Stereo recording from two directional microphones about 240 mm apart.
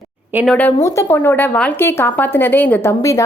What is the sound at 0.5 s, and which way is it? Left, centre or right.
A woman's voice, centre.